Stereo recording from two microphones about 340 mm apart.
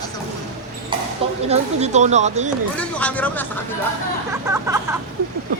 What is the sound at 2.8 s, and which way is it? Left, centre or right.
Speech, centre.